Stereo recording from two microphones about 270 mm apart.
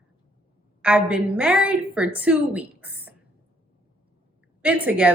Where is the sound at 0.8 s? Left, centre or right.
Centre.